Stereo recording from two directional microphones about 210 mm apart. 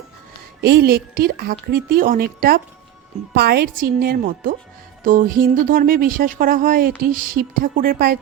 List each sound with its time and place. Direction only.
0.6 s speech: 45° right (ahead or behind)